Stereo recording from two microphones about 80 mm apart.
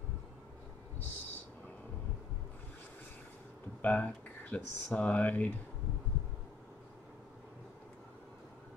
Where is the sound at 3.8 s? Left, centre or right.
Centre.